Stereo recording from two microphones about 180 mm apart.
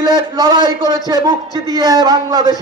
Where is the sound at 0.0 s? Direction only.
25° right (ahead or behind).